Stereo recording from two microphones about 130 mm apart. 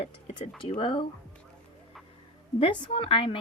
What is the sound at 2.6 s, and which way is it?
Speech, 45° left (ahead or behind).